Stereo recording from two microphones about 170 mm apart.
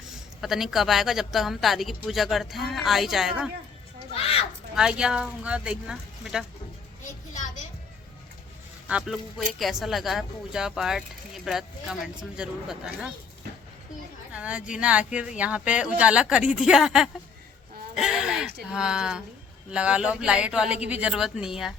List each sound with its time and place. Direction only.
0.4 s speech: centre (ahead or behind)
4.1 s a sound: 35° left (ahead or behind)
4.7 s speech: 5° right (ahead or behind)
7.3 s music: 45° left (ahead or behind)
8.9 s speech: 5° right (ahead or behind)
14.3 s speech: 5° right (ahead or behind)